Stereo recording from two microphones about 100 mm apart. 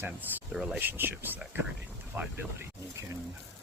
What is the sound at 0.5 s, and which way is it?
Speech, 5° right (ahead or behind).